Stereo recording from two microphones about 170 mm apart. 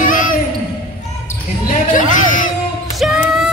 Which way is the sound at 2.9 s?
5° right (ahead or behind).